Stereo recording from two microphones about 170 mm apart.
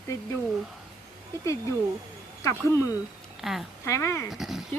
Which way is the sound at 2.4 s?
15° left (ahead or behind).